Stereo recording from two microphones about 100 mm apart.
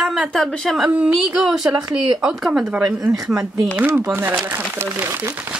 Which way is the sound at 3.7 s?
20° right (ahead or behind).